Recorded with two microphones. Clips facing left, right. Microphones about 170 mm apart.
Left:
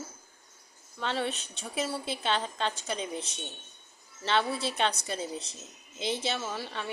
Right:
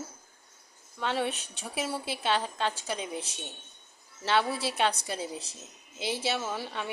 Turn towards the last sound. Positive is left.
turn(degrees=-10)  # may be behind; listen again after turning